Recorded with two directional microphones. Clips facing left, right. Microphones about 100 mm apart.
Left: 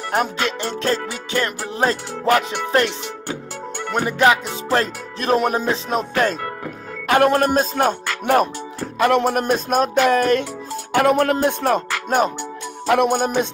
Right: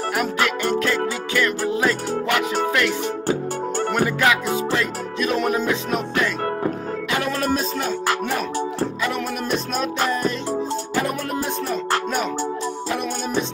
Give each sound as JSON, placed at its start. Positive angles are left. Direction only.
{"t": 0.1, "sound": "music", "side_deg": 30}
{"t": 3.9, "sound": "music", "side_deg": 30}
{"t": 7.1, "sound": "music", "side_deg": 50}
{"t": 10.0, "sound": "music", "side_deg": 65}